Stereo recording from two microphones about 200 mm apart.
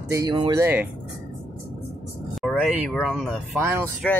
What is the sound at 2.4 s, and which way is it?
Speech, centre (ahead or behind).